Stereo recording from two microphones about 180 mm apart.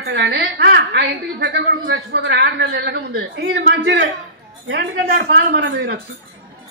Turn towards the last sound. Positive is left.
turn(degrees=-70)  # may be behind; listen again after turning